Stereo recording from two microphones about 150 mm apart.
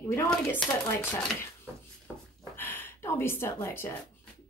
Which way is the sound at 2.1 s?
5° right (ahead or behind).